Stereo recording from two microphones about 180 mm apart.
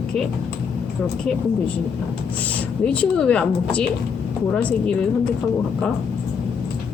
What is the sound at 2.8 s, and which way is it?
Speech, 5° left (ahead or behind).